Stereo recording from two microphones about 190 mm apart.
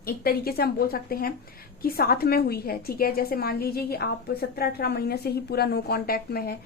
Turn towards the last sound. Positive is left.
turn(degrees=55)  # may be behind; listen again after turning